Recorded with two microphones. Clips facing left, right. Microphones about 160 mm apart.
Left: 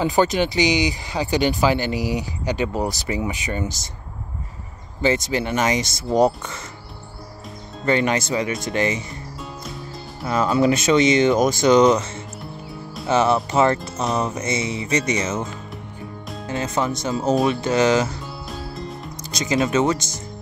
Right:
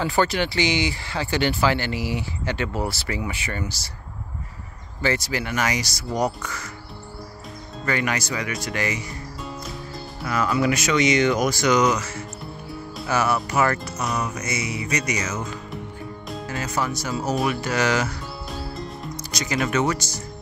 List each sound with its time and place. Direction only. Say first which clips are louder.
0.0 s speech: left 3 dB; 15° left (ahead or behind)
5.0 s speech: left 4 dB; 20° left (ahead or behind)
7.8 s speech: left 5 dB; 25° left (ahead or behind)
10.2 s speech: left 4 dB; 25° left (ahead or behind)
18.5 s music: left 1 dB; centre (ahead or behind)
19.3 s speech: left 4 dB; 25° left (ahead or behind)